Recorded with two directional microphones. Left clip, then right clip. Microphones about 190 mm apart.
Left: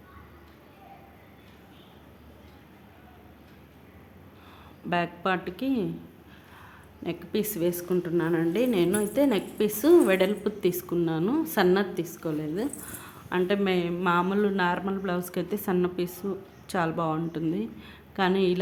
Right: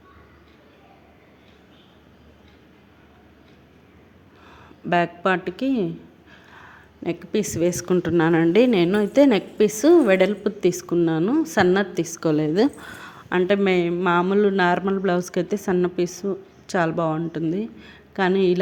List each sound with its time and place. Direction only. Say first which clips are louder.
4.9 s a woman's voice: right 7 dB; 30° right (ahead or behind); by 12.7 s 45° right (ahead or behind)
12.8 s speech: right 6 dB; 35° right (ahead or behind)